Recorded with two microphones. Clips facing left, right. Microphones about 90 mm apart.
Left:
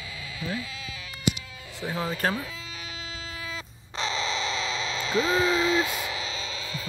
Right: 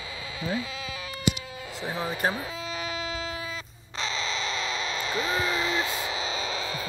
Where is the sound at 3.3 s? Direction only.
10° right (ahead or behind).